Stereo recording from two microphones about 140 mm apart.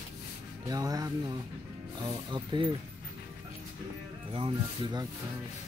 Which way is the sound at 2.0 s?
35° right (ahead or behind).